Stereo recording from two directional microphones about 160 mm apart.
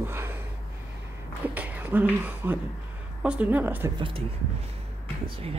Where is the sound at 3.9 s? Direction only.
30° right (ahead or behind).